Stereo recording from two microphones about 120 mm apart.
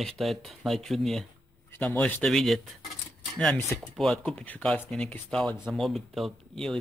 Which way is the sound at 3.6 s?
Centre (ahead or behind).